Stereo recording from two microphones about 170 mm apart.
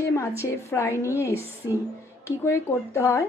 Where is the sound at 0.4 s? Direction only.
15° left (ahead or behind).